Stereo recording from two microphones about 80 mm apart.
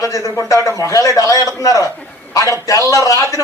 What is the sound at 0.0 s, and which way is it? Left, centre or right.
A man's voice, left.